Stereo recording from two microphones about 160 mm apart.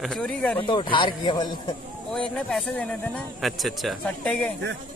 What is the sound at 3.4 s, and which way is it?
A man's voice, centre (ahead or behind).